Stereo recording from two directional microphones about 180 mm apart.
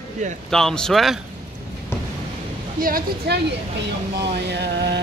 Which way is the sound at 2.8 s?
55° right (ahead or behind).